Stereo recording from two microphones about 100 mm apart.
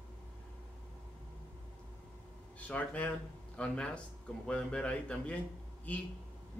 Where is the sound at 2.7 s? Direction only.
15° left (ahead or behind).